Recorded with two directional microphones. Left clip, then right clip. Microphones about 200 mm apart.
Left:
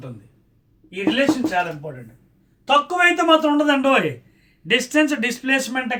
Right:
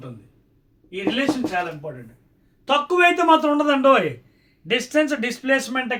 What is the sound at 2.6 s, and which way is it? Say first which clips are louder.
Speech: left 1 dB; 20° right (ahead or behind).